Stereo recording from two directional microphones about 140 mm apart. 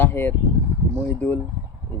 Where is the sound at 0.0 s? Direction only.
15° left (ahead or behind).